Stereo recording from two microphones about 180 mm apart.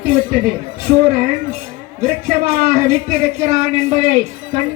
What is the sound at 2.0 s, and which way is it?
Speech, 55° right (ahead or behind).